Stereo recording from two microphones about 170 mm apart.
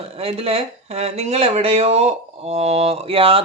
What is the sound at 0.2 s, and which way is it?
Speech, 35° right (ahead or behind).